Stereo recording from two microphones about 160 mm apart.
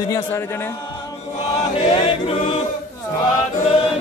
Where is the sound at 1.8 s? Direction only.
35° left (ahead or behind).